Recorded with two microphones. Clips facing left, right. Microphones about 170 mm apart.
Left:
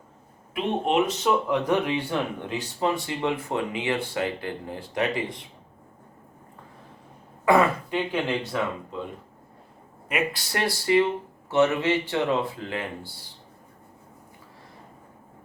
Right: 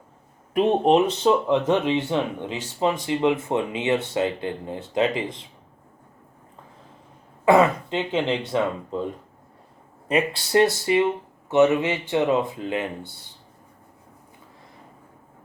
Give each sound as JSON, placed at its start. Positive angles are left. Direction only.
{"t": 0.5, "sound": "speech", "side_deg": -35}
{"t": 7.4, "sound": "speech", "side_deg": -20}
{"t": 10.1, "sound": "speech", "side_deg": -30}